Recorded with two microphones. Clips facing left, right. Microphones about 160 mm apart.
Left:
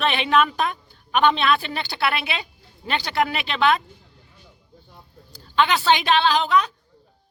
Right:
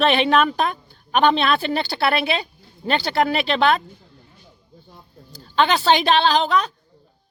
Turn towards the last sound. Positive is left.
turn(degrees=-35)  # may be behind; listen again after turning